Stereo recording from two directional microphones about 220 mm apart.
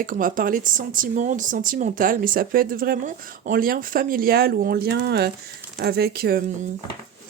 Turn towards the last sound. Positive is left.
turn(degrees=-45)  # may be behind; listen again after turning